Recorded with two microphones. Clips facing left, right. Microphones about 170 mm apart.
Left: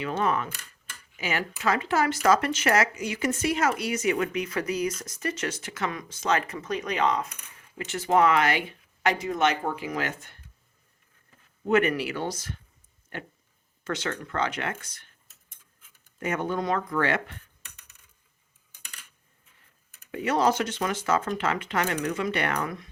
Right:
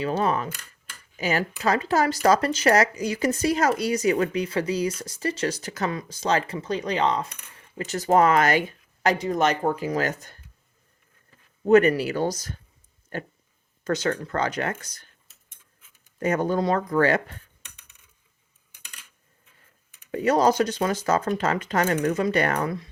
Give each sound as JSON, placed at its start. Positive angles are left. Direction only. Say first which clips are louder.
{"t": 0.0, "sound": "speech", "louder": "right 3 dB", "side_deg": -35}
{"t": 11.6, "sound": "speech", "louder": "right 6 dB", "side_deg": -40}
{"t": 16.2, "sound": "speech", "louder": "right 5 dB", "side_deg": -40}
{"t": 20.1, "sound": "speech", "louder": "right 4 dB", "side_deg": -40}